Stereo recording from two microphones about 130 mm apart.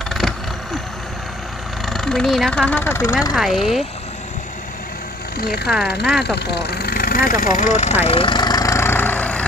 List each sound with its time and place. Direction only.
1.9 s speech: 5° left (ahead or behind); by 3.2 s 20° left (ahead or behind)
3.3 s speech: centre (ahead or behind)
5.7 s speech: 5° right (ahead or behind)
7.2 s speech: 90° left; by 8.0 s 65° left (ahead or behind)
8.1 s vehicle: 40° left (ahead or behind); by 9.5 s 10° left (ahead or behind)